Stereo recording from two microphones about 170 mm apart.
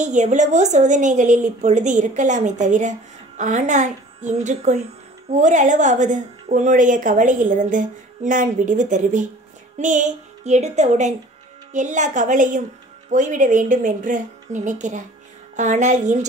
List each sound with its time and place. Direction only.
0.0 s a woman's voice: 45° right (ahead or behind)